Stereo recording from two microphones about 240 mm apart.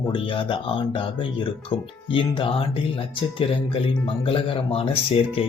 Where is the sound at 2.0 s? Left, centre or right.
Left.